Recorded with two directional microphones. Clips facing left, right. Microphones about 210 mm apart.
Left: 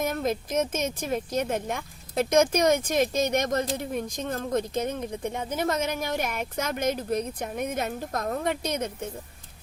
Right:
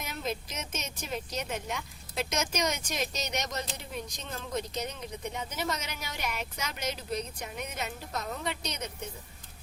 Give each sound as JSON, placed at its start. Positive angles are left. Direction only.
{"t": 0.0, "sound": "speech", "side_deg": 50}